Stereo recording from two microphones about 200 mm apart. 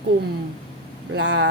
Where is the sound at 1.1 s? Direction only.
60° right (ahead or behind).